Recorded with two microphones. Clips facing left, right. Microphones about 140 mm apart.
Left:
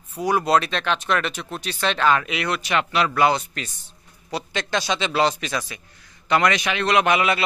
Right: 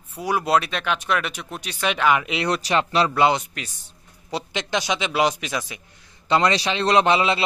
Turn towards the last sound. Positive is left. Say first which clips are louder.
# right 1 dB
turn(degrees=-25)  # may be behind; listen again after turning